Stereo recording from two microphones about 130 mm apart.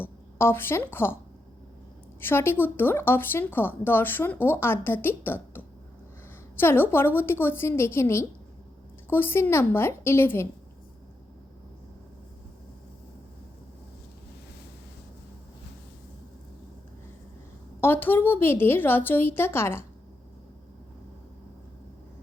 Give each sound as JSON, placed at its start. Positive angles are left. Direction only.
{"t": 0.0, "sound": "a woman's voice", "side_deg": 15}
{"t": 2.2, "sound": "a woman's voice", "side_deg": 15}
{"t": 17.7, "sound": "speech", "side_deg": 15}